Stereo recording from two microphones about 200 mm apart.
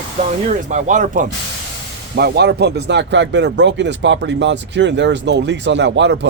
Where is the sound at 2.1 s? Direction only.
55° right (ahead or behind).